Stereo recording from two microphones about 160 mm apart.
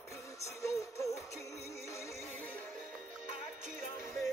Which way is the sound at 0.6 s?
20° left (ahead or behind).